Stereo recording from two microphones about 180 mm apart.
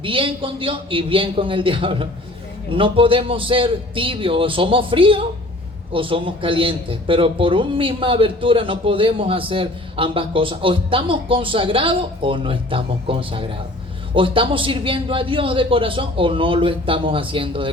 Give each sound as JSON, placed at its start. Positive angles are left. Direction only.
{"t": 0.0, "sound": "a man's voice", "side_deg": -30}